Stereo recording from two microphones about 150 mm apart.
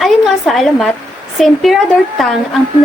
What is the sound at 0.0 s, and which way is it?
Speech, centre (ahead or behind).